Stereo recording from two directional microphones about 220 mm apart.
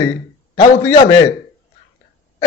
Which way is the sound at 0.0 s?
15° left (ahead or behind).